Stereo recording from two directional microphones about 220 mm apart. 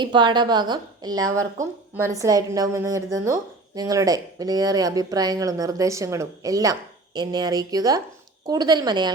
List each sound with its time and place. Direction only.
0.0 s a woman's voice: 20° right (ahead or behind)